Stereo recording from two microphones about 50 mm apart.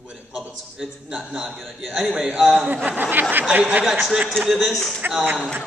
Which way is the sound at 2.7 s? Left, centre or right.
Right.